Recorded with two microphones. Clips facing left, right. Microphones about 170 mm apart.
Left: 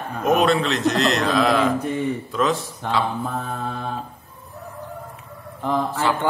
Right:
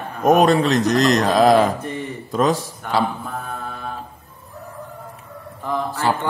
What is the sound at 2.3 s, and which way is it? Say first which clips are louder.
Speech: right 3 dB; 40° right (ahead or behind).